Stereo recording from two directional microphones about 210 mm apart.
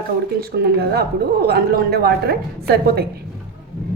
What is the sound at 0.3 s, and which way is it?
A woman's voice, 45° right (ahead or behind).